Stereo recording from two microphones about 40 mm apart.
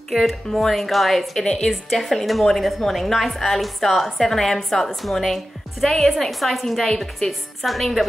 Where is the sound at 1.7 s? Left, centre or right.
Centre.